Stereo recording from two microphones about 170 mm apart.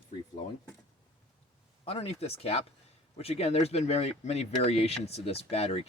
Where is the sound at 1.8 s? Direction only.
35° left (ahead or behind).